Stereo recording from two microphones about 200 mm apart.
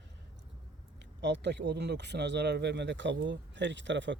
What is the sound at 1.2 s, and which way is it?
Speech, 60° right (ahead or behind).